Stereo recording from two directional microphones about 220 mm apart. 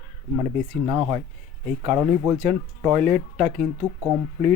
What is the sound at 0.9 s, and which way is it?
Speech, 10° right (ahead or behind).